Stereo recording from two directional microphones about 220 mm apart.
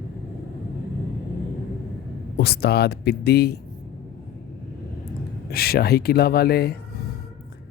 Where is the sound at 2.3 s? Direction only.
45° left (ahead or behind).